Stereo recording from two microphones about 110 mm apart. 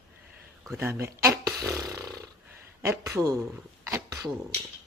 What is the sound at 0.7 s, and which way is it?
Speech, 20° right (ahead or behind).